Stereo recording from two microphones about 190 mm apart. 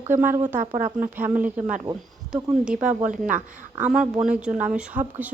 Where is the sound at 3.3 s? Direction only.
45° right (ahead or behind).